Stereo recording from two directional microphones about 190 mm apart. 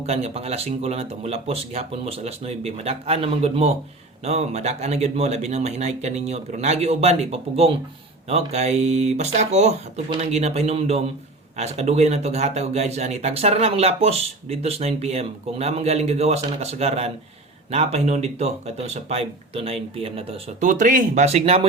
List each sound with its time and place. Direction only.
0.0 s speech: 35° right (ahead or behind)
20.7 s speech: 45° right (ahead or behind)